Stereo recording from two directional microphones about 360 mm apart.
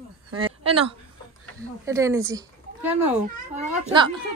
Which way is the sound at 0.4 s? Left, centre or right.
Centre.